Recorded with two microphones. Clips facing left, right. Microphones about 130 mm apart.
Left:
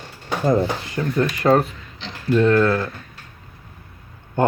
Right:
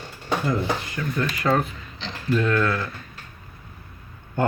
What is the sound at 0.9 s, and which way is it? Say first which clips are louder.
Speech: left 5 dB; 30° left (ahead or behind).